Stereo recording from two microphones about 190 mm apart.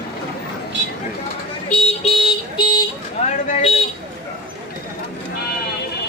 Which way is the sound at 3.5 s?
35° left (ahead or behind).